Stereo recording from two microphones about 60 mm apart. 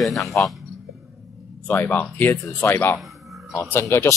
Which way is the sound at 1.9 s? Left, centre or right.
Left.